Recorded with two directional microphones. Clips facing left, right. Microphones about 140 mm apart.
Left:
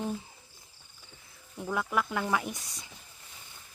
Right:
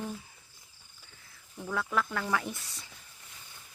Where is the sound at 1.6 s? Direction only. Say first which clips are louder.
Left 1 dB; 15° left (ahead or behind).